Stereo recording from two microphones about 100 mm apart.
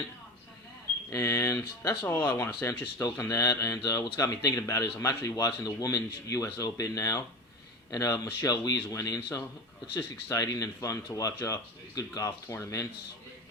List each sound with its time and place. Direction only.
1.1 s speech: 30° left (ahead or behind)
2.0 s speech: 25° left (ahead or behind)